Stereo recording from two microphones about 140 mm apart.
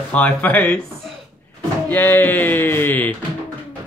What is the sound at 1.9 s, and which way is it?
Speech, 15° left (ahead or behind).